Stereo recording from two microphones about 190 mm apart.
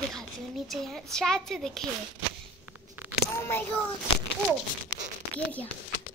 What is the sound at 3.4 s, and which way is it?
Speech, 10° left (ahead or behind).